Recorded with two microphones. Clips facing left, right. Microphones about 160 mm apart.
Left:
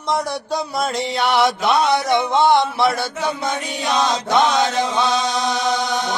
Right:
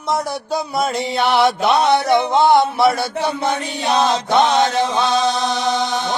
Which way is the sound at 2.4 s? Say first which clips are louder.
Right 1 dB; centre (ahead or behind).